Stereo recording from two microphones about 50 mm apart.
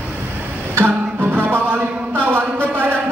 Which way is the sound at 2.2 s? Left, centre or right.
Right.